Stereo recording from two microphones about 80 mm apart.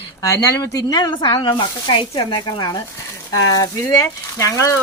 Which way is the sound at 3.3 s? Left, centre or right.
Left.